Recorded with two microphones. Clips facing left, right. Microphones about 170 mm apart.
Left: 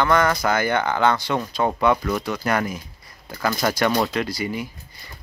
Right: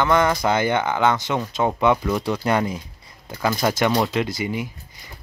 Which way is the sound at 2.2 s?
25° right (ahead or behind).